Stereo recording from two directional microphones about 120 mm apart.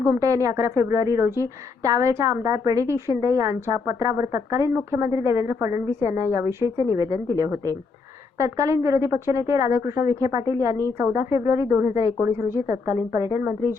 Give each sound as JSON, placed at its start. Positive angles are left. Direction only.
{"t": 0.0, "sound": "a woman's voice", "side_deg": -25}